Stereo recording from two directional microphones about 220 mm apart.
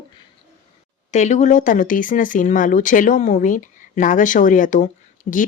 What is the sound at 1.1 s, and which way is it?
Speech, 30° left (ahead or behind).